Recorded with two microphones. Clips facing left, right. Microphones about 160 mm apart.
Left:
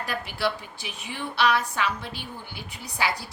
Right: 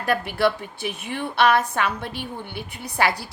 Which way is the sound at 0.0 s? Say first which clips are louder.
Right 7 dB; 55° right (ahead or behind).